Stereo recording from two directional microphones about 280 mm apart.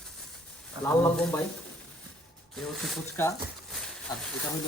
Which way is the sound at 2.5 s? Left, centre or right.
Centre.